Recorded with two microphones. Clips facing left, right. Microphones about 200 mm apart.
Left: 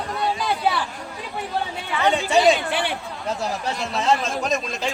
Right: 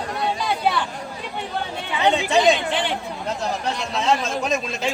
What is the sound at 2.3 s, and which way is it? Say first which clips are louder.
Speech: left 3 dB; 10° left (ahead or behind).